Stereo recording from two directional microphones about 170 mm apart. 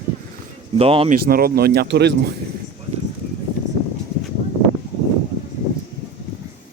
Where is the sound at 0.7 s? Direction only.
35° right (ahead or behind).